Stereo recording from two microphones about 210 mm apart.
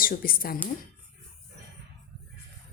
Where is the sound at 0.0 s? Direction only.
45° left (ahead or behind).